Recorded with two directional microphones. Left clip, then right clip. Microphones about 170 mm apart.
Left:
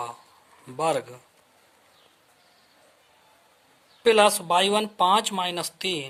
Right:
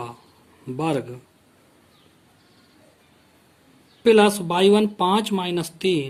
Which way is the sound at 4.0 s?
35° left (ahead or behind).